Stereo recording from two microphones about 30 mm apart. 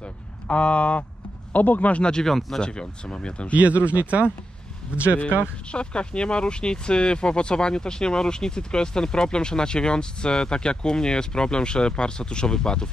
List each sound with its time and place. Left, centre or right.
0.0 s a sound: left
1.5 s speech: left
2.2 s speech: centre
2.6 s speech: left
3.5 s speech: right
5.7 s speech: left